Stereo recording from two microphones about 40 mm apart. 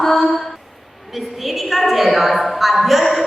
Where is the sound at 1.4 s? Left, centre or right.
Centre.